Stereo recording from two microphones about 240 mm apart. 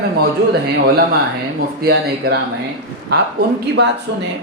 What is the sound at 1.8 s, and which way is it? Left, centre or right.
Speech, right.